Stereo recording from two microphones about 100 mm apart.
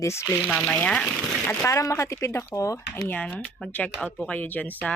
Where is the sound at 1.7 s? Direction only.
30° left (ahead or behind).